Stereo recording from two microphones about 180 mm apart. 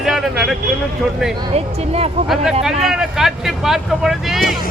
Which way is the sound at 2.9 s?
Centre (ahead or behind).